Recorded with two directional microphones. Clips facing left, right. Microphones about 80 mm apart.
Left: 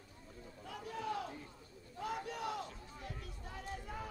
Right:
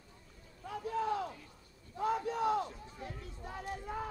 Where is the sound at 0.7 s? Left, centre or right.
Right.